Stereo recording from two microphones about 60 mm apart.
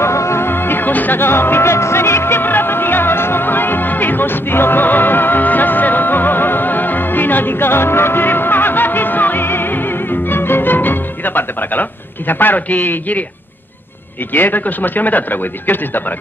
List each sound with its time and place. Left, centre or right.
0.0 s music: left
14.3 s speech: left